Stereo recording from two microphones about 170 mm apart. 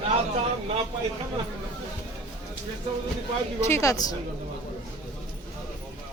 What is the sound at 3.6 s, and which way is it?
Speech, 15° left (ahead or behind).